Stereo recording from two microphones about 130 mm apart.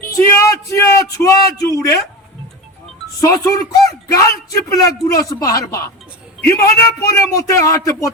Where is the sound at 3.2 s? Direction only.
25° left (ahead or behind).